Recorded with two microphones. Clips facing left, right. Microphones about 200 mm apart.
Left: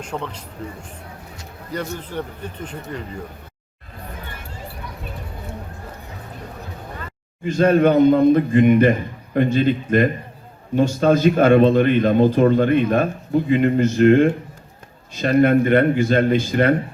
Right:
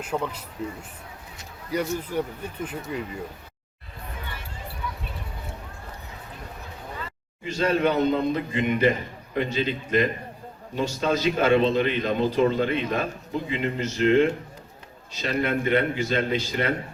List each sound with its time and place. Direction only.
0.0 s speech: 5° right (ahead or behind)
1.7 s speech: 10° right (ahead or behind)
7.4 s a man's voice: 50° left (ahead or behind)